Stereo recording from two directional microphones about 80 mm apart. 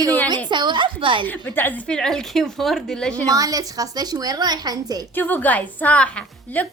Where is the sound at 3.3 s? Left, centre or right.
Right.